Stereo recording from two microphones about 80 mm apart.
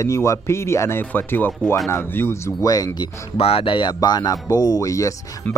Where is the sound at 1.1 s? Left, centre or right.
Left.